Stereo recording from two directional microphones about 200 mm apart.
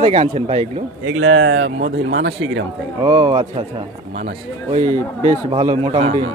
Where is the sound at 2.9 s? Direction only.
25° right (ahead or behind).